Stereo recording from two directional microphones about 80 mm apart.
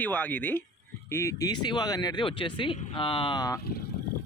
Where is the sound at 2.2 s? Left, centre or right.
Left.